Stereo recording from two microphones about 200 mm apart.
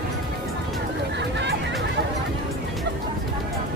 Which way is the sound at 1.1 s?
60° right (ahead or behind).